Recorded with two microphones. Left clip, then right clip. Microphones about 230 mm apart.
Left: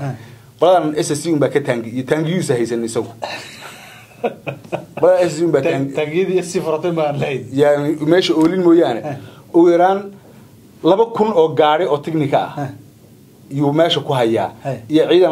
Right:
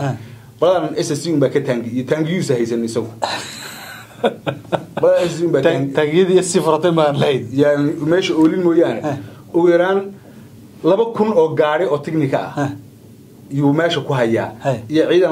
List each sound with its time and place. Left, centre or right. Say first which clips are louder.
0.6 s speech: left 2 dB; left
3.2 s a sound: right 5 dB; right
5.0 s speech: left 2 dB; left
5.9 s a man's voice: right 4 dB; centre
7.5 s speech: left 6 dB; left
13.6 s speech: left 2 dB; left